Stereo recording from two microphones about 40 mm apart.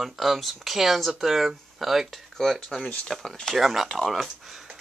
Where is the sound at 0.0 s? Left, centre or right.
Centre.